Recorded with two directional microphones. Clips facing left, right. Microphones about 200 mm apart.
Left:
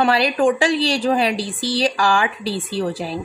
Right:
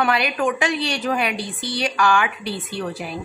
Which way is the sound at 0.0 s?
30° left (ahead or behind).